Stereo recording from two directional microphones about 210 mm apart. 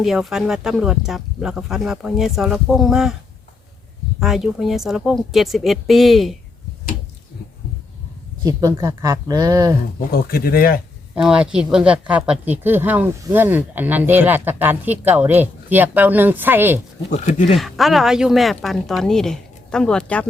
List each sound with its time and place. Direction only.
0.0 s speech: centre (ahead or behind)
4.2 s speech: centre (ahead or behind)
8.4 s speech: 15° right (ahead or behind)
10.1 s speech: 45° left (ahead or behind)
11.1 s speech: 5° right (ahead or behind)
17.1 s speech: 35° left (ahead or behind)
17.6 s speech: centre (ahead or behind)